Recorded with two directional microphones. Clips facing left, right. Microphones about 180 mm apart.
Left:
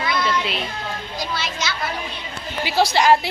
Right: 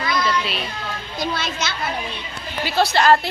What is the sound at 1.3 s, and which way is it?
Speech, 55° right (ahead or behind).